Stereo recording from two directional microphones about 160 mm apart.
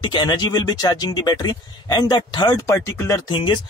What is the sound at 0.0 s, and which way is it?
A man's voice, 30° left (ahead or behind).